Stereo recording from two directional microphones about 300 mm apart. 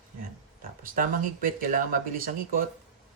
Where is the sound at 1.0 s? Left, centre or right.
Right.